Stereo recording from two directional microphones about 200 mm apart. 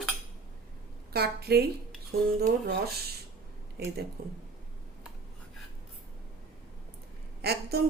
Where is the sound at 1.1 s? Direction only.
50° right (ahead or behind).